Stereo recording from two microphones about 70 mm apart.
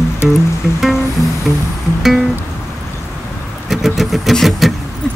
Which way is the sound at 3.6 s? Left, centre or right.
Centre.